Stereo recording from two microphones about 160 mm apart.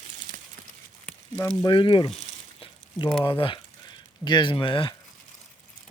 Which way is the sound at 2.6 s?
30° left (ahead or behind).